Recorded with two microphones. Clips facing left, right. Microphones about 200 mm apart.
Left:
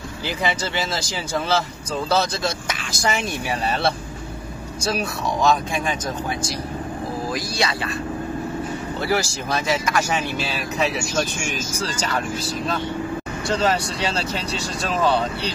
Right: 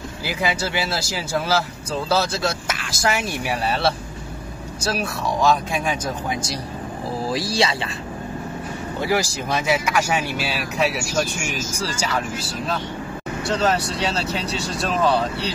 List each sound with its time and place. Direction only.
0.3 s speech: 10° right (ahead or behind)
7.3 s speech: 25° right (ahead or behind)
9.0 s speech: 15° right (ahead or behind)
13.5 s speech: centre (ahead or behind)